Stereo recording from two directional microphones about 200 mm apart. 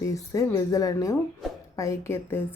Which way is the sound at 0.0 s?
15° left (ahead or behind).